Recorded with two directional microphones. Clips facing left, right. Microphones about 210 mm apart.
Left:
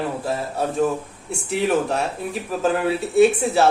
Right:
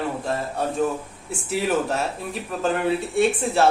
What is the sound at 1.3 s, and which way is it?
Speech, centre (ahead or behind).